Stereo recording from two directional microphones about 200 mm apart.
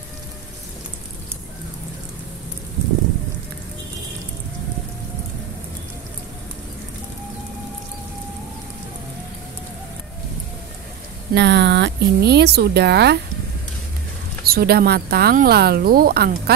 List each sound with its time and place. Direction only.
11.3 s speech: 60° right (ahead or behind)
14.4 s speech: 50° right (ahead or behind)